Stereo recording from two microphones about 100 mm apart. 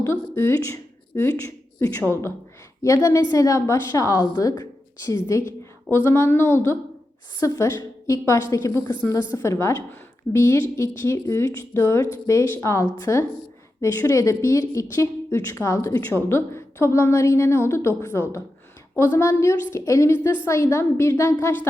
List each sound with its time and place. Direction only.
0.0 s a woman's voice: 25° left (ahead or behind)
9.4 s a woman's voice: 25° left (ahead or behind)